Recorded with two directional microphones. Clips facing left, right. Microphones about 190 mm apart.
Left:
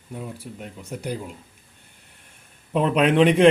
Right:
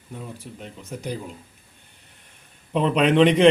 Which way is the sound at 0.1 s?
10° left (ahead or behind).